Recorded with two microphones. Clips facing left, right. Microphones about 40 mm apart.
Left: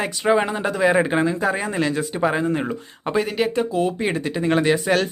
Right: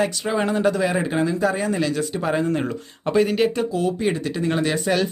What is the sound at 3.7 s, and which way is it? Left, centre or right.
Speech, left.